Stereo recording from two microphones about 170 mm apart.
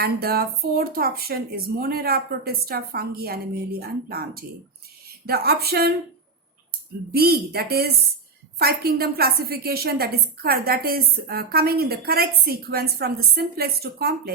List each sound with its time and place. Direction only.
0.0 s speech: 65° right (ahead or behind)
7.1 s speech: 65° right (ahead or behind)